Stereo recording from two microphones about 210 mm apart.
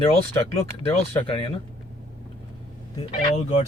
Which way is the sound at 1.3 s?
25° left (ahead or behind).